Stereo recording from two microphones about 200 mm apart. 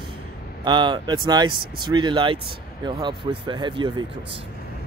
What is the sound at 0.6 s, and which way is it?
Speech, 25° right (ahead or behind).